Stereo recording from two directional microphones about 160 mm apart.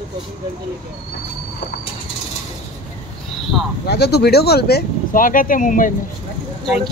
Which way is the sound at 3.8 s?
90° left.